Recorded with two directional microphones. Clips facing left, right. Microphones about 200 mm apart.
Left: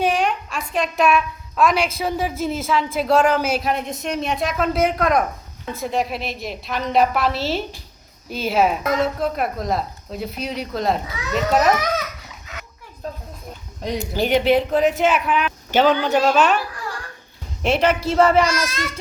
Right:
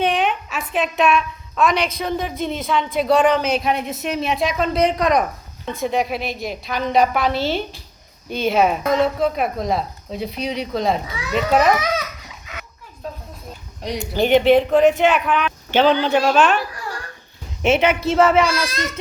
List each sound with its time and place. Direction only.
0.0 s a woman's voice: centre (ahead or behind)
14.2 s a woman's voice: centre (ahead or behind)
17.6 s a woman's voice: centre (ahead or behind)
18.4 s a child's voice: 35° right (ahead or behind)